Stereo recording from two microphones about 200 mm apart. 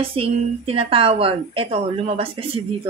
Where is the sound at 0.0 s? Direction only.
30° right (ahead or behind).